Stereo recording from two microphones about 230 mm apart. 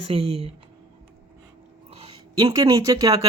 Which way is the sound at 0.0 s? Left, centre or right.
Right.